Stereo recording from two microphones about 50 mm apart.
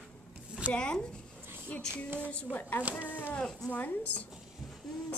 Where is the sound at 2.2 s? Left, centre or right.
Left.